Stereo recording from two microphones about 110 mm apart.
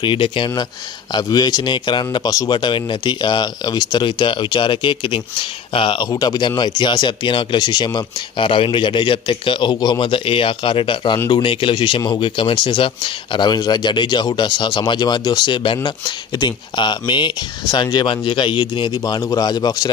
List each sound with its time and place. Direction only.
0.0 s speech: 50° left (ahead or behind)
1.1 s a man's voice: 40° left (ahead or behind)